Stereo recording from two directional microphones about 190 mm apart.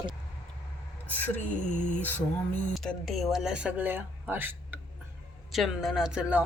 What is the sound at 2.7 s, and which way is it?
Speech, centre (ahead or behind).